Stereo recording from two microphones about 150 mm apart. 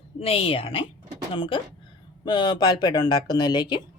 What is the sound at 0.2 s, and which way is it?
A woman's voice, 40° left (ahead or behind).